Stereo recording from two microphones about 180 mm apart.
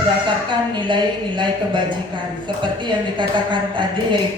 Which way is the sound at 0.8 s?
25° right (ahead or behind).